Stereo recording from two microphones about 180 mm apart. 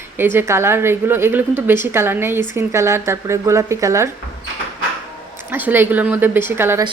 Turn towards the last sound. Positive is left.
turn(degrees=-15)  # may be behind; listen again after turning